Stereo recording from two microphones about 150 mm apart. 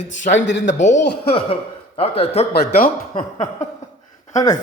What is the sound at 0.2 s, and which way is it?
A man's voice, 55° left (ahead or behind).